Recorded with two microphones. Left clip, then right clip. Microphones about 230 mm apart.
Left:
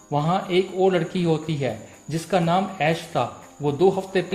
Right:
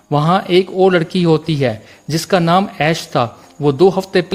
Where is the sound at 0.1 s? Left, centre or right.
Right.